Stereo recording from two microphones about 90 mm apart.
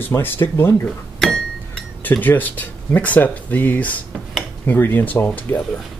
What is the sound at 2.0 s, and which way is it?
Speech, 20° left (ahead or behind).